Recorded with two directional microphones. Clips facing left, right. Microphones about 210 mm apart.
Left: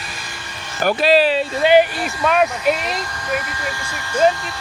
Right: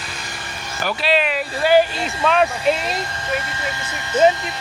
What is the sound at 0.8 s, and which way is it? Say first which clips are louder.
Speech: left 6 dB; 40° left (ahead or behind).